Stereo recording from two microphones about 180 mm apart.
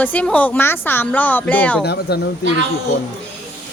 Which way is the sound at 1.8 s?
65° left (ahead or behind).